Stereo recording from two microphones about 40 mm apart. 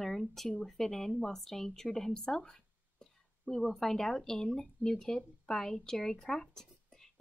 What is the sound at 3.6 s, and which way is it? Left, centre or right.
Speech, centre.